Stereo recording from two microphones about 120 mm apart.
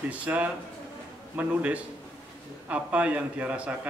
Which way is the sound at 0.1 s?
10° right (ahead or behind).